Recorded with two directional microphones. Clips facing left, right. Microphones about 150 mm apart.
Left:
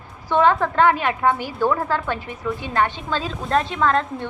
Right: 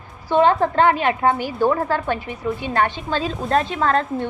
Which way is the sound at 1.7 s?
45° right (ahead or behind).